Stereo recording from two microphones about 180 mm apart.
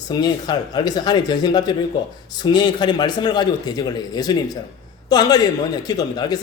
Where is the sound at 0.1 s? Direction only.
25° left (ahead or behind).